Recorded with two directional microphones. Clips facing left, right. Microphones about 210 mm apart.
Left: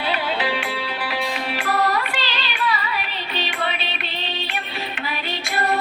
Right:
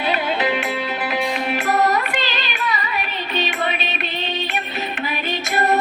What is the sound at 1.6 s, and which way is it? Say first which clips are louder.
Music: right 2 dB; 20° right (ahead or behind).